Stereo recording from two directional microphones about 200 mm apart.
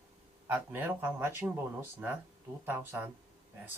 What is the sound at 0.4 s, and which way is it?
Speech, 10° right (ahead or behind).